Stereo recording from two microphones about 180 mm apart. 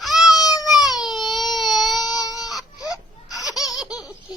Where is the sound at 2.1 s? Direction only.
20° left (ahead or behind).